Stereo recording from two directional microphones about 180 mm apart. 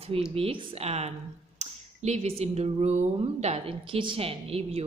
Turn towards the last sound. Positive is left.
turn(degrees=-35)  # may be behind; listen again after turning